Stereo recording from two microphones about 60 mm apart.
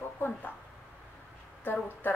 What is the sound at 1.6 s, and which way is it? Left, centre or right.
Speech, left.